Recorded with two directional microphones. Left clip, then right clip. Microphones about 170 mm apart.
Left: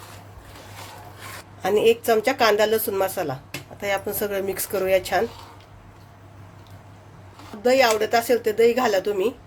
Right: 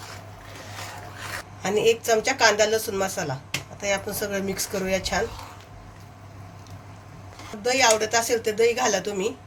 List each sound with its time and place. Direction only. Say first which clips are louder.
1.6 s speech: left 3 dB; 40° left (ahead or behind)
7.6 s speech: left 2 dB; 45° left (ahead or behind)